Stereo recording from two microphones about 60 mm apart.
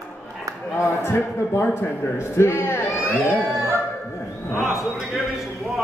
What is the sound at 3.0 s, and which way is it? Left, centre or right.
Speech, left.